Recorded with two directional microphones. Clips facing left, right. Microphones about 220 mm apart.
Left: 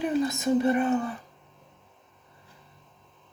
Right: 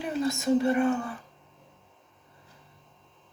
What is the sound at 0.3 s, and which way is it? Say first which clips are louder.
Speech: even; 20° left (ahead or behind).